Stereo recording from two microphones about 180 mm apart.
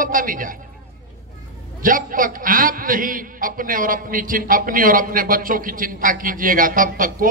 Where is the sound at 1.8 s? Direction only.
50° right (ahead or behind).